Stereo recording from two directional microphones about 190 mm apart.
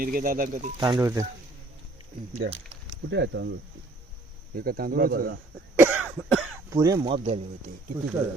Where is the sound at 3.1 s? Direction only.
65° right (ahead or behind).